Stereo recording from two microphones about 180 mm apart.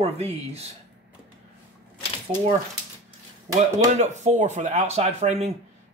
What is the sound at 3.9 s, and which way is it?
Speech, 40° right (ahead or behind).